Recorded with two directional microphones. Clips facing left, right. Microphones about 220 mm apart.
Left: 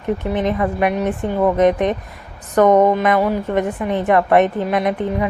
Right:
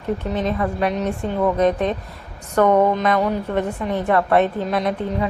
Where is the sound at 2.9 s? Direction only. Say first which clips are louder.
Left 3 dB; 15° left (ahead or behind).